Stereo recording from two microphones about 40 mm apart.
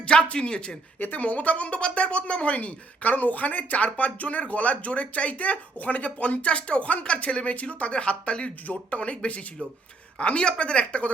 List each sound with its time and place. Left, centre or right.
0.0 s speech: left
0.9 s speech: left
1.2 s speech: left